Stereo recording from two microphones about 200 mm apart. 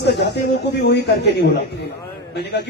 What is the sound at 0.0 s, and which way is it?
A man's voice, 55° left (ahead or behind).